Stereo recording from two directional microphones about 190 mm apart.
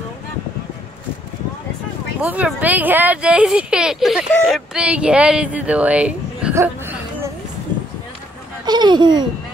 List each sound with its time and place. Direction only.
2.2 s speech: 10° right (ahead or behind)
8.6 s speech: 25° right (ahead or behind)